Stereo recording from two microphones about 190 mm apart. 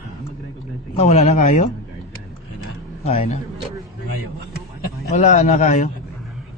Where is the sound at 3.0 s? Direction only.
35° left (ahead or behind).